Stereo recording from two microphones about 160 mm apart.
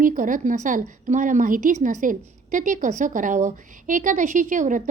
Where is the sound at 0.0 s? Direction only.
55° right (ahead or behind).